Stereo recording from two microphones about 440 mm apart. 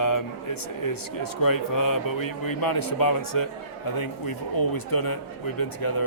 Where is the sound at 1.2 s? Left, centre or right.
Left.